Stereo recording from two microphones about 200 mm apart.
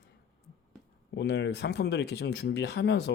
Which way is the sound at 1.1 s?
60° left (ahead or behind).